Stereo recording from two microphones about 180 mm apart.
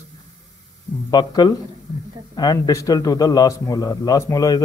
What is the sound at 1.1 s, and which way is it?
A man's voice, 25° left (ahead or behind).